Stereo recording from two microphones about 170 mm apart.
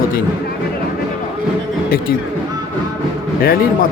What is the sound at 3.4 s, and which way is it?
Speech, 60° left (ahead or behind).